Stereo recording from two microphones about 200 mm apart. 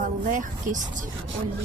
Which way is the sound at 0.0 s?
40° right (ahead or behind).